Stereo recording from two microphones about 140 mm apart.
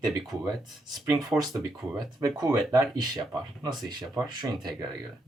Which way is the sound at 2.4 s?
25° right (ahead or behind).